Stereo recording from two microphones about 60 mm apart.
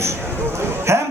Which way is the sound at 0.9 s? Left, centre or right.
Right.